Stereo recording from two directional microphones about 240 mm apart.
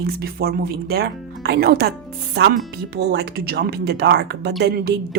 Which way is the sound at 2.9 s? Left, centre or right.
Right.